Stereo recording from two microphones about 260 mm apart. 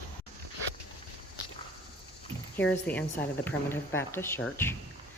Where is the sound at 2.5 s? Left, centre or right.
Centre.